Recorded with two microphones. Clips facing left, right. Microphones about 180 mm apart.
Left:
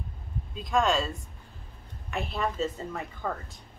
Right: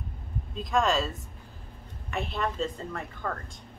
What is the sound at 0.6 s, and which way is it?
Speech, centre (ahead or behind).